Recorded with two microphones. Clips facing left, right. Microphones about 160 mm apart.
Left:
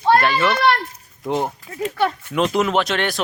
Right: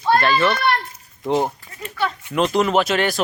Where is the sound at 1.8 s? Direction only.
60° left (ahead or behind).